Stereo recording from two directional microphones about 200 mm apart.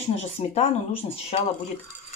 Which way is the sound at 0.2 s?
30° left (ahead or behind).